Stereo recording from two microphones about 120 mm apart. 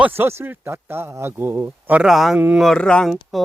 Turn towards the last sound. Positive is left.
turn(degrees=0)  # may be behind; listen again after turning